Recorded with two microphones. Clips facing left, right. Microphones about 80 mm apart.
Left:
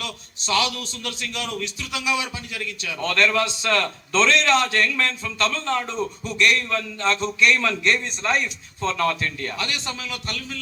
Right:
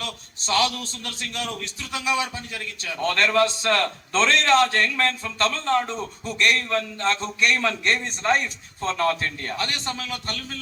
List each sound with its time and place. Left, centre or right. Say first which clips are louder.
0.0 s a man's voice: even; right